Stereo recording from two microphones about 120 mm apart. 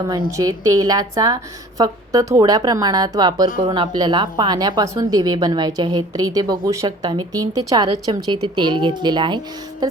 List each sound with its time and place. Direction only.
0.3 s a woman's voice: 30° right (ahead or behind)